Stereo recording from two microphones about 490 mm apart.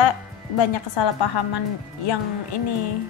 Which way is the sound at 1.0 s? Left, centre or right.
Left.